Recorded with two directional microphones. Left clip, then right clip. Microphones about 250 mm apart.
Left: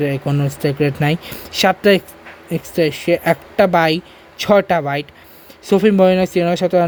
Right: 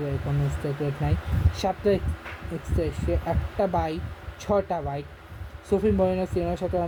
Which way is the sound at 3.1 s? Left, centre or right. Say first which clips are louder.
Left 13 dB; left.